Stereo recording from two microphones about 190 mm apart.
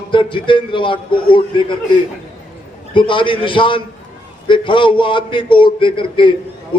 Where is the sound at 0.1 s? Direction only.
25° left (ahead or behind).